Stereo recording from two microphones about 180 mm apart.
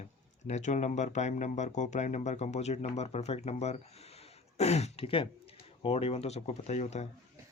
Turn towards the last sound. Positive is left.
turn(degrees=40)  # may be behind; listen again after turning